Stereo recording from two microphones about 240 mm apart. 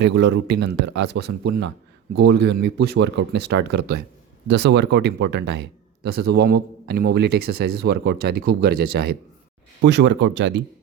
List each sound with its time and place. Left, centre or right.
0.0 s speech: right